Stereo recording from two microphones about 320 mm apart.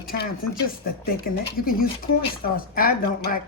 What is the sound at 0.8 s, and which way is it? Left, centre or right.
Speech, left.